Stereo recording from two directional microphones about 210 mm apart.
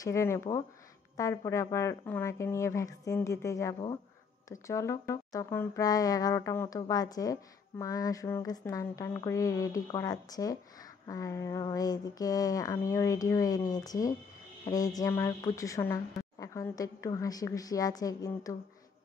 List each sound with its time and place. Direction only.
0.0 s a woman's voice: 15° left (ahead or behind)